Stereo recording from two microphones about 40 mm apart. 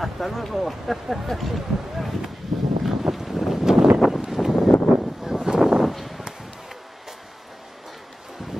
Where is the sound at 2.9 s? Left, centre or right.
Centre.